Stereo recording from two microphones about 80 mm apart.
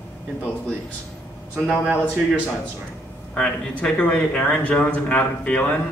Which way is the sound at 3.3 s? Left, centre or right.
Centre.